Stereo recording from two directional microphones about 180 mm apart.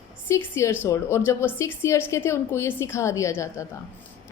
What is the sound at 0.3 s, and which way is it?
A woman's voice, 15° left (ahead or behind).